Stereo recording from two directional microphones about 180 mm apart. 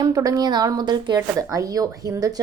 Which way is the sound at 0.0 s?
20° right (ahead or behind).